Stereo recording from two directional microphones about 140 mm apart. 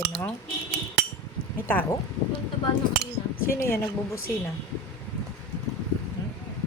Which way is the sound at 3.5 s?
20° left (ahead or behind).